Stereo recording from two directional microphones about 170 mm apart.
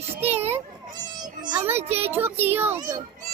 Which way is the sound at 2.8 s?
20° right (ahead or behind).